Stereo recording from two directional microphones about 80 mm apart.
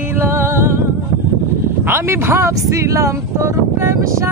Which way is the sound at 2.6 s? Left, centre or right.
Right.